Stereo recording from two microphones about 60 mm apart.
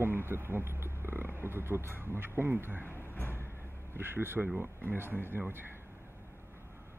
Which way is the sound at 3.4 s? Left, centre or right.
Right.